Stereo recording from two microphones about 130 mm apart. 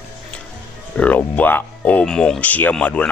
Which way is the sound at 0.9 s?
10° left (ahead or behind).